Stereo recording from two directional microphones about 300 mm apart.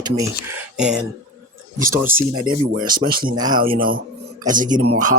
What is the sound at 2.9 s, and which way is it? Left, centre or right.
Speech, right.